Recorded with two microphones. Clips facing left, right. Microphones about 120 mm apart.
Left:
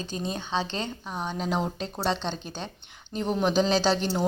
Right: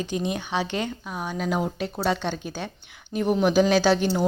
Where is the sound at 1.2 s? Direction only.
30° left (ahead or behind).